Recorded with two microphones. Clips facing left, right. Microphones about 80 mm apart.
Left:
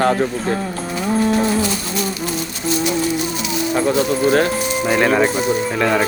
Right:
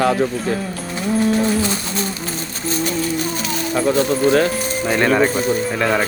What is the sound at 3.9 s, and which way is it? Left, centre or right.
Speech, right.